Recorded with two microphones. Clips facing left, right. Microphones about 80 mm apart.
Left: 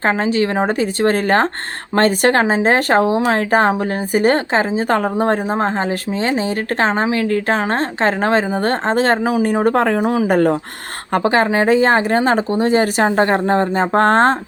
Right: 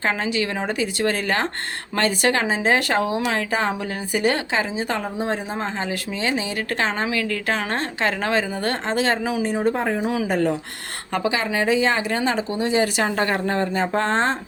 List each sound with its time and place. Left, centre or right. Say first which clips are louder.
0.0 s speech: left 7 dB; left
4.9 s speech: left 8 dB; left
10.1 s speech: left 7 dB; left